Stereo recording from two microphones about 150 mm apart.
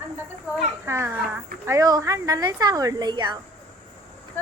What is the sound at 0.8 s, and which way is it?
A child's voice, 15° right (ahead or behind).